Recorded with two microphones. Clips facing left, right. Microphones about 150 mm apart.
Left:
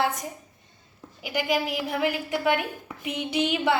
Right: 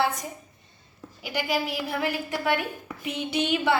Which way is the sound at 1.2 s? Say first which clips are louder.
Left 2 dB; 20° left (ahead or behind).